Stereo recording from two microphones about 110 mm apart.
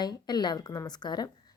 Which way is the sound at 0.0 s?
40° left (ahead or behind).